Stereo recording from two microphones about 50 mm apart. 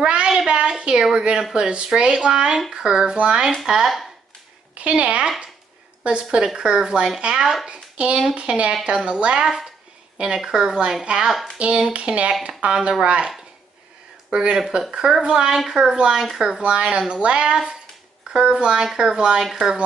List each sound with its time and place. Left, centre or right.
0.0 s a sound: centre
0.5 s a woman's voice: centre
11.5 s speech: right
14.3 s a woman's voice: centre